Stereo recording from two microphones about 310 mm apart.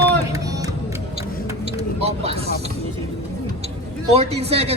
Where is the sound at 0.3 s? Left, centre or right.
Centre.